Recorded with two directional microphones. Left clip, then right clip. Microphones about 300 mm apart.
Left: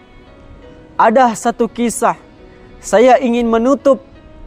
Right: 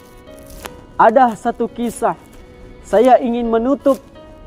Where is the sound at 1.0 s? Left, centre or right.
Left.